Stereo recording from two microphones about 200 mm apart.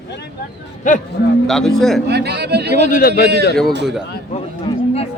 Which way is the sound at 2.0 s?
55° right (ahead or behind).